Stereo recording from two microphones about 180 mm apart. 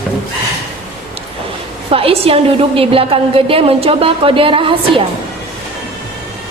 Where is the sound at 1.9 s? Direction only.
30° right (ahead or behind).